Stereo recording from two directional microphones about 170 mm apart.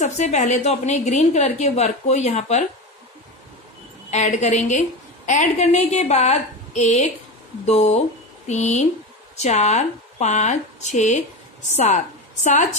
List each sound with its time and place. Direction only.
0.0 s a woman's voice: 45° left (ahead or behind)
4.1 s a woman's voice: 45° left (ahead or behind)